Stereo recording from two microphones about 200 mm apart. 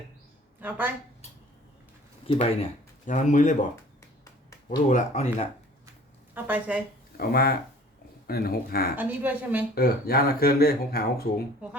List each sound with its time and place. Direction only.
2.2 s speech: 30° left (ahead or behind)
4.9 s speech: 35° left (ahead or behind)
6.3 s a woman's voice: 5° right (ahead or behind)
7.2 s speech: 50° left (ahead or behind)
9.0 s a woman's voice: 10° right (ahead or behind)
9.7 s speech: 50° left (ahead or behind)